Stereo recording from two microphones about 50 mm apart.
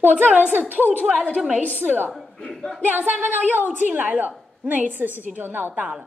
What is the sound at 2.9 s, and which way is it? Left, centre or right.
A woman's voice, right.